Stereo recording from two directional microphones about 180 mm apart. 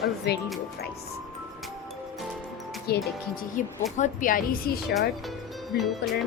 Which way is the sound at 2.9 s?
60° left (ahead or behind).